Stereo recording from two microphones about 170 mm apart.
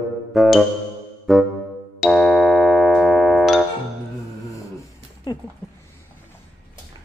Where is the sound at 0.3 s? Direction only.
Centre (ahead or behind).